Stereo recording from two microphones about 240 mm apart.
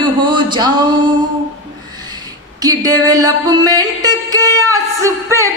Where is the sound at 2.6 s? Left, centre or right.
Centre.